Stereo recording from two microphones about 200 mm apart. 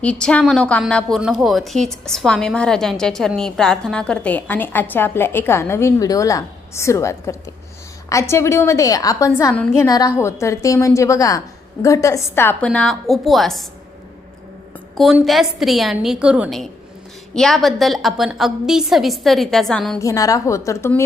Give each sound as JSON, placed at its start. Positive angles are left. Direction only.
{"t": 0.0, "sound": "a woman's voice", "side_deg": 5}
{"t": 14.9, "sound": "a woman's voice", "side_deg": 0}
{"t": 20.0, "sound": "a woman's voice", "side_deg": 15}